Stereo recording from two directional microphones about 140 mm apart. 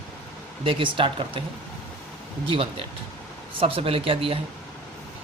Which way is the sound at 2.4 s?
40° right (ahead or behind).